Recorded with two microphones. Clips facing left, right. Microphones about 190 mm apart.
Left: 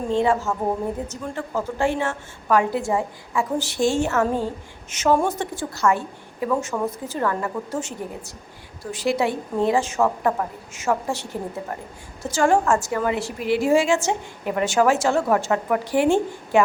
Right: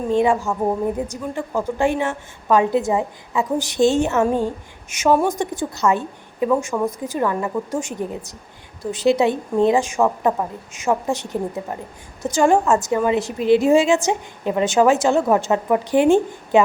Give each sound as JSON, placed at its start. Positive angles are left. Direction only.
{"t": 0.1, "sound": "a woman's voice", "side_deg": -15}